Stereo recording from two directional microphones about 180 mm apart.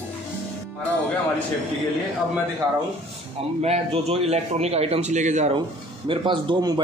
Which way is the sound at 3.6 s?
35° right (ahead or behind).